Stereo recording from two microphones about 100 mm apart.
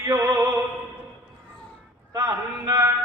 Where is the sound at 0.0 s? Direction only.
35° right (ahead or behind).